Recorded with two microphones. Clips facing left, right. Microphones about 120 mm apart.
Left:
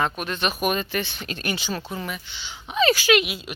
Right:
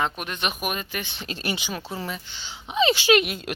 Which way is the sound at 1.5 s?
15° right (ahead or behind).